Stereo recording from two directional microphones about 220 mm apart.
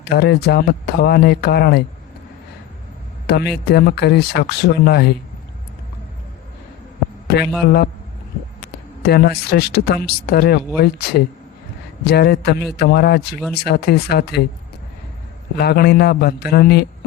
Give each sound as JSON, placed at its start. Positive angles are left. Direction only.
{"t": 0.0, "sound": "speech", "side_deg": 45}
{"t": 3.2, "sound": "speech", "side_deg": 50}
{"t": 9.0, "sound": "speech", "side_deg": 45}
{"t": 15.5, "sound": "speech", "side_deg": 45}